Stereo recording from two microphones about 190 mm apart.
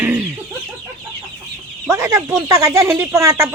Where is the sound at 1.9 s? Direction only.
15° right (ahead or behind).